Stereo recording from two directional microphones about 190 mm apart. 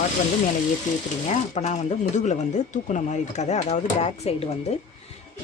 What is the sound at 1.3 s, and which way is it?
Speech, 35° left (ahead or behind).